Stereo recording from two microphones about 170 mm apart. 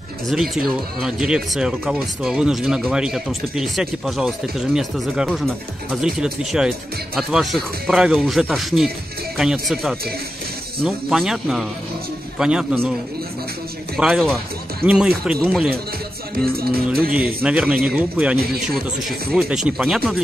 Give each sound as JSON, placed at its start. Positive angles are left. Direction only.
{"t": 0.3, "sound": "speech", "side_deg": 0}
{"t": 13.9, "sound": "speech", "side_deg": 0}
{"t": 16.5, "sound": "music", "side_deg": -65}
{"t": 17.1, "sound": "speech", "side_deg": -5}